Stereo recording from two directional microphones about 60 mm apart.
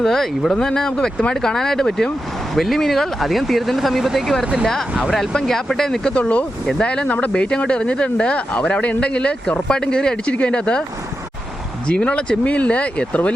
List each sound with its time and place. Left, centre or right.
0.0 s speech: centre
11.9 s speech: centre